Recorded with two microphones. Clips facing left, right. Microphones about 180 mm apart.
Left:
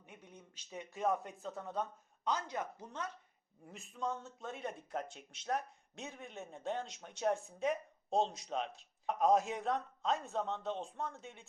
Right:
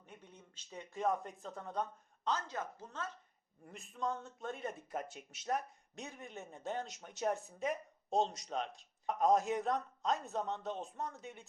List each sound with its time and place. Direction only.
0.0 s speech: 10° left (ahead or behind)
2.2 s speech: 15° left (ahead or behind)
3.7 s speech: centre (ahead or behind)